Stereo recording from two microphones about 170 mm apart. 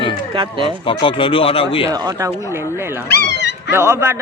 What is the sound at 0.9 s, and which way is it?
Speech, 30° left (ahead or behind).